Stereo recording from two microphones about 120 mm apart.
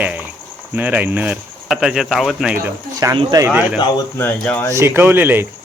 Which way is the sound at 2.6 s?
25° right (ahead or behind).